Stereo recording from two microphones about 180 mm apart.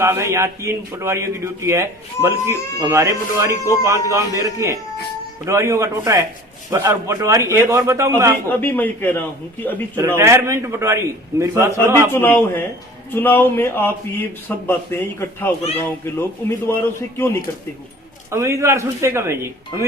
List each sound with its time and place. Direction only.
0.0 s a man's voice: 15° right (ahead or behind)
8.4 s a man's voice: 10° left (ahead or behind)
9.9 s a man's voice: 15° right (ahead or behind)
12.1 s a man's voice: 10° left (ahead or behind)
18.3 s a man's voice: 15° right (ahead or behind)